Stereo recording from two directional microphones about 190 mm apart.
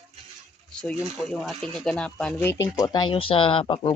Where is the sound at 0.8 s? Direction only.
5° left (ahead or behind); by 3.9 s 30° left (ahead or behind).